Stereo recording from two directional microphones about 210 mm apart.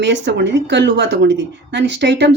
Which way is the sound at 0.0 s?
55° right (ahead or behind).